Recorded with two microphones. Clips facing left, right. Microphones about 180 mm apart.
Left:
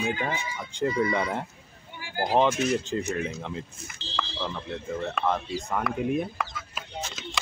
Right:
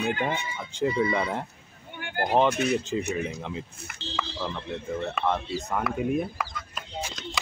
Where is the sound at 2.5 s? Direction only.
60° right (ahead or behind).